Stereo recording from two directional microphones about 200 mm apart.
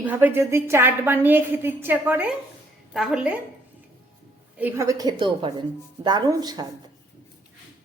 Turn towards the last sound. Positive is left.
turn(degrees=-20)  # may be behind; listen again after turning